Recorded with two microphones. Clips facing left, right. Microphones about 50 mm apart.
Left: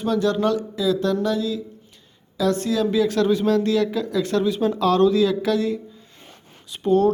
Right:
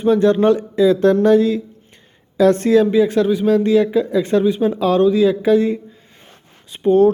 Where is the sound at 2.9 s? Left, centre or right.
Right.